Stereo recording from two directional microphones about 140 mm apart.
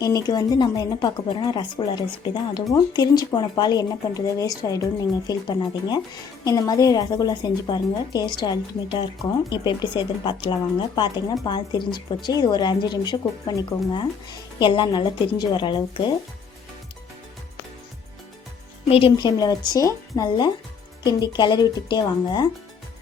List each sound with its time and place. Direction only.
0.0 s a woman's voice: 30° left (ahead or behind)
18.9 s a woman's voice: 40° left (ahead or behind)
19.1 s a woman's voice: 30° left (ahead or behind)